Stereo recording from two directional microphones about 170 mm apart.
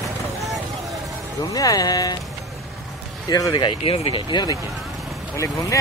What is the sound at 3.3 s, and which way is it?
Speech, 20° left (ahead or behind).